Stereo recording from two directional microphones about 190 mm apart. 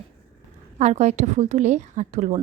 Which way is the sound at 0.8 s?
35° right (ahead or behind).